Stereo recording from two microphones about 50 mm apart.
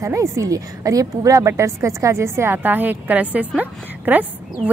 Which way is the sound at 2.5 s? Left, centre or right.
Right.